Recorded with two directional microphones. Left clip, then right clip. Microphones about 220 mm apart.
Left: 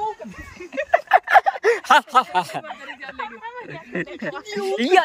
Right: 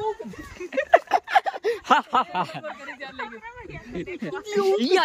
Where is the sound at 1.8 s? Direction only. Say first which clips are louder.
Left 3 dB; 25° left (ahead or behind).